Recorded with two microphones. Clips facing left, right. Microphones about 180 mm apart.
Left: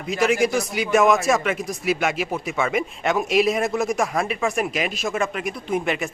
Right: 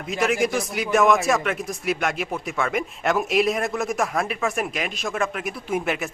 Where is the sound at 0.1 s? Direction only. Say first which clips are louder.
Left 2 dB; centre (ahead or behind).